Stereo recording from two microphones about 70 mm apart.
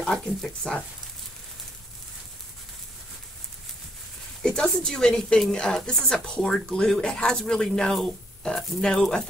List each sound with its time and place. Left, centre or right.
0.0 s speech: centre
4.4 s a sound: centre
4.8 s speech: centre